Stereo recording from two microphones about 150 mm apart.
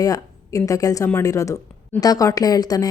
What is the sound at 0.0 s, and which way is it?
Speech, 25° left (ahead or behind).